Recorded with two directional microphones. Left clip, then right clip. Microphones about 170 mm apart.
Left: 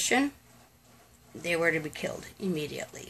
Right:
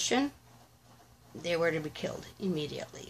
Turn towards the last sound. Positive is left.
turn(degrees=15)  # may be behind; listen again after turning